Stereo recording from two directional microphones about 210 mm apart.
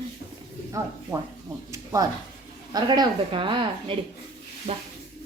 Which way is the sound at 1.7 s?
15° right (ahead or behind).